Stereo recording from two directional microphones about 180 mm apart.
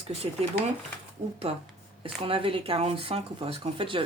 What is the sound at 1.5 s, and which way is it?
Speech, 35° right (ahead or behind).